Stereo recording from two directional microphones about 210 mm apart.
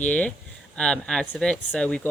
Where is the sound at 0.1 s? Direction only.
5° left (ahead or behind).